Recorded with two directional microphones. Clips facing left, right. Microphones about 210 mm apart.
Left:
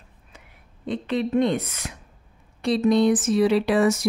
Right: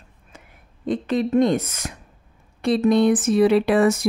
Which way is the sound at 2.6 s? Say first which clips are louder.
Right 2 dB; 55° right (ahead or behind).